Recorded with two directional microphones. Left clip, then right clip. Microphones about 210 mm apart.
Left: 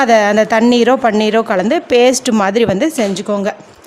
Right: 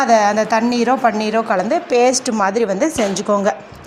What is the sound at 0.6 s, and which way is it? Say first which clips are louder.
Speech: left 7 dB; 50° left (ahead or behind).